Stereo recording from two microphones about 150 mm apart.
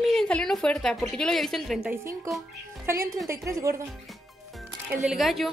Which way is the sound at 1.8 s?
20° right (ahead or behind).